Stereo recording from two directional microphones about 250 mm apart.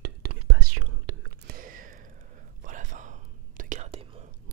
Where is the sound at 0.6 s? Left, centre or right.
Right.